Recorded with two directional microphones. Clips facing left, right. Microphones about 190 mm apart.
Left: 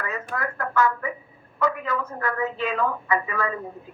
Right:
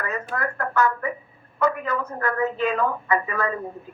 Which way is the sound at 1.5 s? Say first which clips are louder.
Right 2 dB; 40° right (ahead or behind).